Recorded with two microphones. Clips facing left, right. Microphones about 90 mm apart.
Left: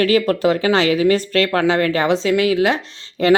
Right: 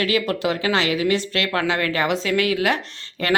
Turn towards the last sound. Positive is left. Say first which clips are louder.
# left 9 dB
turn(degrees=25)  # may be behind; listen again after turning